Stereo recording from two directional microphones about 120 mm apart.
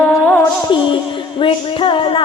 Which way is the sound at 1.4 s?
45° left (ahead or behind).